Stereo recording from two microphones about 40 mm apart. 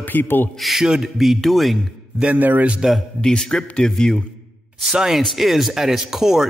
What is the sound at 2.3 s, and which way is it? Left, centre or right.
Speech, right.